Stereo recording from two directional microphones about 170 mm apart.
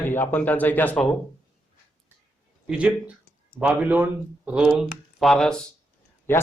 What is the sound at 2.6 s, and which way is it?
Speech, 5° right (ahead or behind).